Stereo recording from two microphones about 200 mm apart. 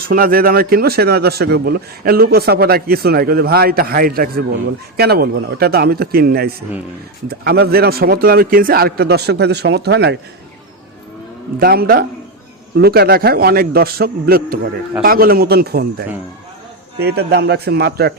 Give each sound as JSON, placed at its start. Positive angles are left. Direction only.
{"t": 0.1, "sound": "speech", "side_deg": -45}
{"t": 11.6, "sound": "speech", "side_deg": -50}